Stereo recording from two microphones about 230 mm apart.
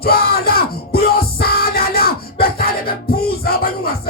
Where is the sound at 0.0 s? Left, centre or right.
Left.